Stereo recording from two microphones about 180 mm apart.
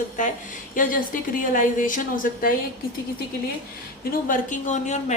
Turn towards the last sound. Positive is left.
turn(degrees=40)  # may be behind; listen again after turning